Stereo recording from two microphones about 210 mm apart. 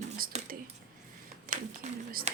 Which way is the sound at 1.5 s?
35° right (ahead or behind).